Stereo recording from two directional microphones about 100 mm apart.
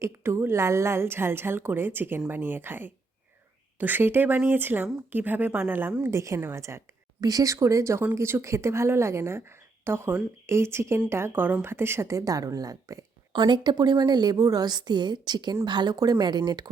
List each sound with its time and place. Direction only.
0.0 s a woman's voice: 25° right (ahead or behind)
6.0 s a woman's voice: 30° right (ahead or behind)
7.2 s a woman's voice: 40° right (ahead or behind)
13.3 s a woman's voice: 50° right (ahead or behind)